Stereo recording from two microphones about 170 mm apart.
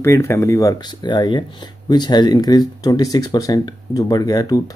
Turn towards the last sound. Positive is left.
turn(degrees=20)  # may be behind; listen again after turning